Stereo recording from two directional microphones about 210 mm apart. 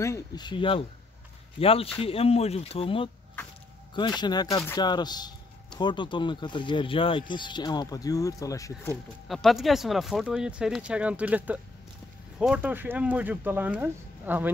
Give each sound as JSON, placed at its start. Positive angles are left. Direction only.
{"t": 0.0, "sound": "speech", "side_deg": 15}
{"t": 4.2, "sound": "speech", "side_deg": 20}
{"t": 9.3, "sound": "speech", "side_deg": 0}